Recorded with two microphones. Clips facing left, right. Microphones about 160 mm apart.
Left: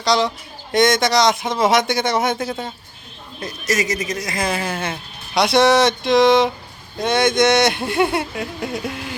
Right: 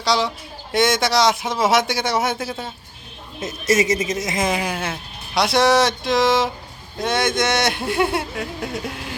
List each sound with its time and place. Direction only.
0.0 s speech: 5° right (ahead or behind)
3.4 s speech: 25° right (ahead or behind); by 9.0 s centre (ahead or behind)